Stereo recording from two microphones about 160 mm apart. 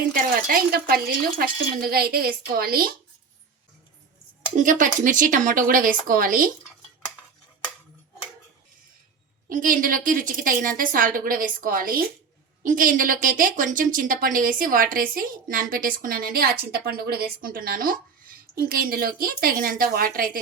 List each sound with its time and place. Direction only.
0.1 s speech: 65° right (ahead or behind)
4.5 s a woman's voice: 55° right (ahead or behind)
9.5 s a woman's voice: 60° right (ahead or behind)